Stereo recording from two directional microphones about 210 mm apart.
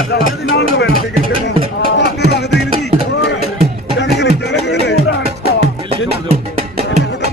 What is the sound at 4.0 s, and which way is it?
Music, 55° left (ahead or behind).